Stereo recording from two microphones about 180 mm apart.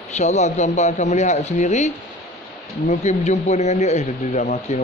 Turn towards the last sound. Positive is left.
turn(degrees=45)  # may be behind; listen again after turning